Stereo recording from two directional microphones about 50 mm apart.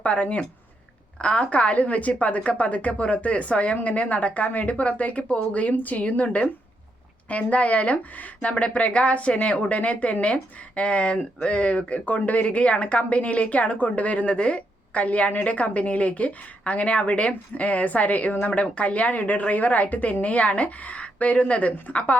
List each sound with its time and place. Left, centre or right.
0.0 s speech: left